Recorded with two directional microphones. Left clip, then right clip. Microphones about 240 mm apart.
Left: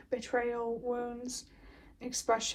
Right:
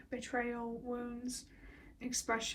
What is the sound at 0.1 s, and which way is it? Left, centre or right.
Speech, centre.